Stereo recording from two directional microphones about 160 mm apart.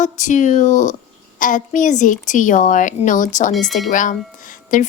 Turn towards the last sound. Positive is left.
turn(degrees=55)  # may be behind; listen again after turning